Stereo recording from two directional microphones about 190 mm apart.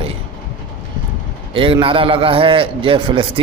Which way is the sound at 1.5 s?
30° right (ahead or behind).